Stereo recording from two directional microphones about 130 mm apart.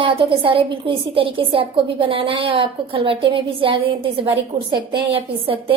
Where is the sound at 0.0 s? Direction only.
45° right (ahead or behind).